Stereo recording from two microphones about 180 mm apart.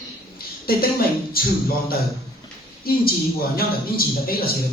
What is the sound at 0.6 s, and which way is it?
A woman's voice, 55° left (ahead or behind).